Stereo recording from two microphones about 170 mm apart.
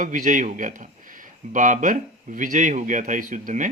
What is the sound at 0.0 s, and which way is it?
A man's voice, 50° right (ahead or behind).